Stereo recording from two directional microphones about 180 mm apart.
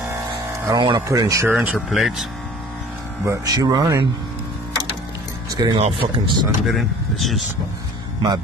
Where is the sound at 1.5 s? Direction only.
5° right (ahead or behind).